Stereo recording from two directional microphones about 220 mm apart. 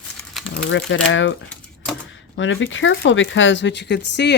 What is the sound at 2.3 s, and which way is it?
Speech, 60° left (ahead or behind).